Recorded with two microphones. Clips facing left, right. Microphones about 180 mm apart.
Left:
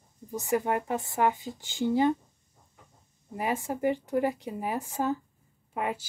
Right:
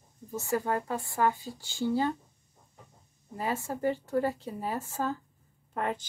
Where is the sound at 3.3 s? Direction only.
15° left (ahead or behind).